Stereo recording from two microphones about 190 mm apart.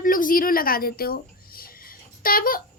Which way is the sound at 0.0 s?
45° left (ahead or behind).